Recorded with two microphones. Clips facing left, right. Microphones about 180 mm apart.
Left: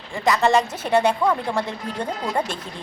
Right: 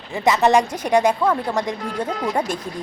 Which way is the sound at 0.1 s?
20° right (ahead or behind).